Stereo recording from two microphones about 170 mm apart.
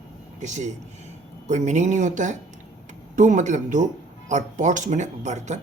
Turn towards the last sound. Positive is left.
turn(degrees=-45)  # may be behind; listen again after turning